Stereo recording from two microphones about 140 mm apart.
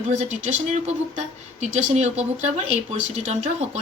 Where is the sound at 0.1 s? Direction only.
60° right (ahead or behind).